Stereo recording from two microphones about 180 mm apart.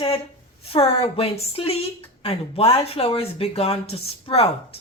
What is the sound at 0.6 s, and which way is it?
A woman's voice, 30° left (ahead or behind).